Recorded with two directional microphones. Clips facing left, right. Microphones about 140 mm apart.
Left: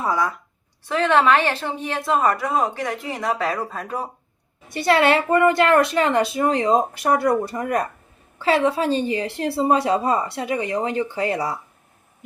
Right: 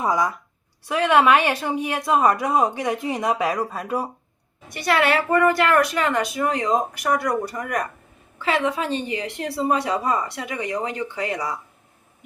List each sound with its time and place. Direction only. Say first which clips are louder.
0.0 s speech: right 1 dB; 15° right (ahead or behind)
4.7 s a woman's voice: left 3 dB; 30° left (ahead or behind)